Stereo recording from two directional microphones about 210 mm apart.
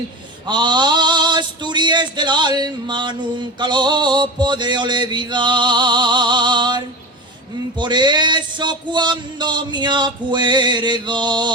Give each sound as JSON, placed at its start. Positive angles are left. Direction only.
{"t": 0.4, "sound": "male singing", "side_deg": -20}